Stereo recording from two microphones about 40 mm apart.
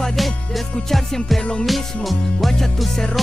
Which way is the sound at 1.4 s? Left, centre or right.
Left.